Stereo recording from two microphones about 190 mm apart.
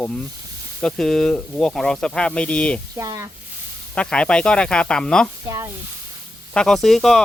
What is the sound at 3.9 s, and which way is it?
Speech, 5° left (ahead or behind).